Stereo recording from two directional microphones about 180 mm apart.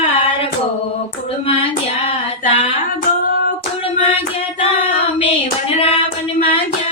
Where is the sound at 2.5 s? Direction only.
30° left (ahead or behind).